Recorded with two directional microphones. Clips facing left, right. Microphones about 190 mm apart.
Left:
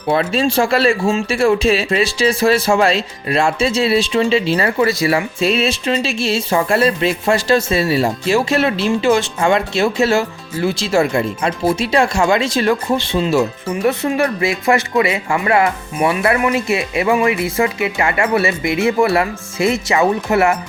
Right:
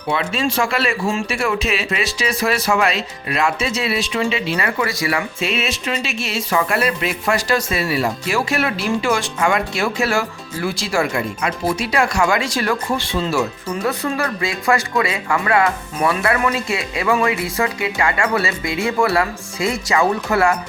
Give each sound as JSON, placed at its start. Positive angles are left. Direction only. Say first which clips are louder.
{"t": 0.1, "sound": "speech", "louder": "left 5 dB", "side_deg": 40}